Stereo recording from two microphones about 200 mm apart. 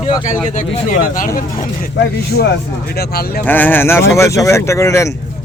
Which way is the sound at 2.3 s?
55° left (ahead or behind).